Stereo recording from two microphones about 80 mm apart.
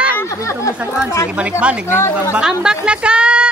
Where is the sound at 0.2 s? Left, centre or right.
Left.